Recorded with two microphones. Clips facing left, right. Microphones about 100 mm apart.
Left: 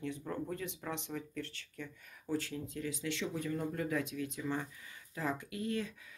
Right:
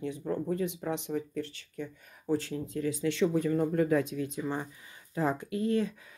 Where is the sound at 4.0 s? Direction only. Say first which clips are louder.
Right 6 dB; 30° right (ahead or behind).